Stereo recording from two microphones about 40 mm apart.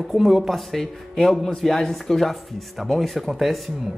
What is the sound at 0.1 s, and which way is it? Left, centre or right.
Speech, centre.